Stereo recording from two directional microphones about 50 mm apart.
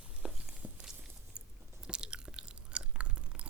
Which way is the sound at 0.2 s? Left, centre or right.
Centre.